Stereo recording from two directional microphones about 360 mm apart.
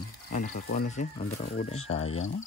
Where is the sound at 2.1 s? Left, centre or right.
Left.